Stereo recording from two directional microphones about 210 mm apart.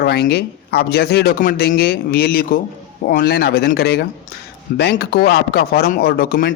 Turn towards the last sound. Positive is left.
turn(degrees=45)  # may be behind; listen again after turning